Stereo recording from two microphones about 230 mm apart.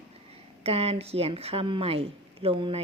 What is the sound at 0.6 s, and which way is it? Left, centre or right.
A woman's voice, right.